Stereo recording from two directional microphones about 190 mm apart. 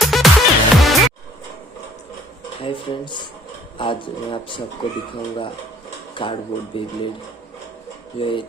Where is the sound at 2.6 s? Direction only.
30° left (ahead or behind).